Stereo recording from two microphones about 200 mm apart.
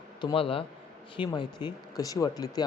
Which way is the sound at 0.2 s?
25° left (ahead or behind).